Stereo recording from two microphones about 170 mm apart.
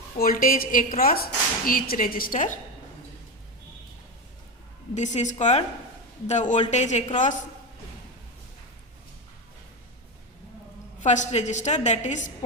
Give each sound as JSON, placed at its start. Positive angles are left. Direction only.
{"t": 0.2, "sound": "a woman's voice", "side_deg": 60}
{"t": 4.9, "sound": "a woman's voice", "side_deg": 45}
{"t": 11.0, "sound": "a woman's voice", "side_deg": 45}